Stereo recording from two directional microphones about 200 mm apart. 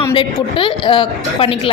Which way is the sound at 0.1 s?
25° left (ahead or behind).